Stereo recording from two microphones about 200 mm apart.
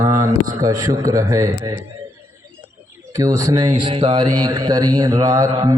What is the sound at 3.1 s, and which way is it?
A man's voice, 15° right (ahead or behind).